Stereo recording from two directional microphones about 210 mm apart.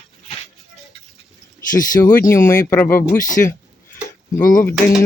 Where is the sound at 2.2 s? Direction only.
15° left (ahead or behind).